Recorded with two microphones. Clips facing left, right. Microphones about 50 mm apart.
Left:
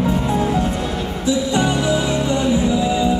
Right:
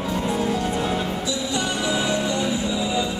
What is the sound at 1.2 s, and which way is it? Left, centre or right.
Music, left.